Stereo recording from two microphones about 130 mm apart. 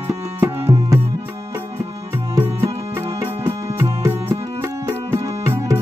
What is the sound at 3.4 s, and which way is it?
Music, 20° right (ahead or behind).